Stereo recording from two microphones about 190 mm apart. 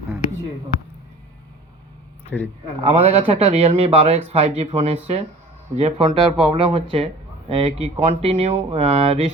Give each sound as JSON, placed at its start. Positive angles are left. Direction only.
{"t": 2.3, "sound": "a man's voice", "side_deg": -5}
{"t": 2.8, "sound": "a man's voice", "side_deg": -35}